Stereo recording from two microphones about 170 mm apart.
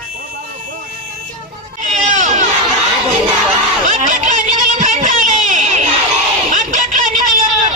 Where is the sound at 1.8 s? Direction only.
45° right (ahead or behind).